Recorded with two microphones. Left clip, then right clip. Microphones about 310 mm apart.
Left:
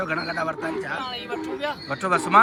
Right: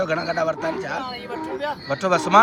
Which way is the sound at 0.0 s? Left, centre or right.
Centre.